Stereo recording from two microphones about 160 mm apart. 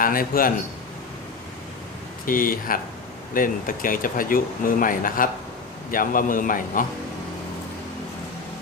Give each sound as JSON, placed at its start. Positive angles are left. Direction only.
{"t": 0.0, "sound": "speech", "side_deg": 60}
{"t": 2.2, "sound": "speech", "side_deg": 60}